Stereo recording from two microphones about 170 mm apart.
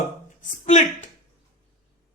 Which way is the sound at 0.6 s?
45° left (ahead or behind).